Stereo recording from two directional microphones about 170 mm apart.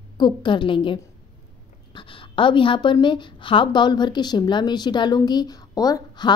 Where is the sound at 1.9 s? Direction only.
30° left (ahead or behind).